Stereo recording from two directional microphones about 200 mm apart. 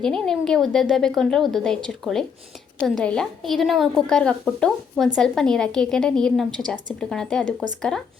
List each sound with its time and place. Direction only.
0.0 s a woman's voice: centre (ahead or behind)